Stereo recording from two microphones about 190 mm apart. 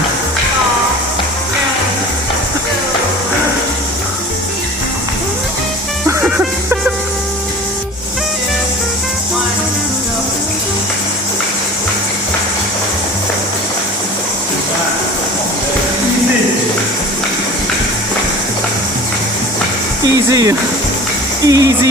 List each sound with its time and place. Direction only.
6.1 s music: 10° right (ahead or behind)
20.3 s music: 20° right (ahead or behind)
21.4 s a sound: 20° right (ahead or behind)